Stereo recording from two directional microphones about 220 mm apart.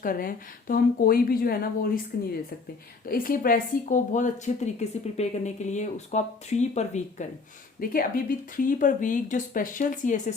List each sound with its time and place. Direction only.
0.0 s a woman's voice: 40° left (ahead or behind)